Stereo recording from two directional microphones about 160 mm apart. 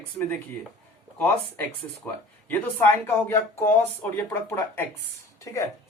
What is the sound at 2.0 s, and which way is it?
Speech, 15° left (ahead or behind).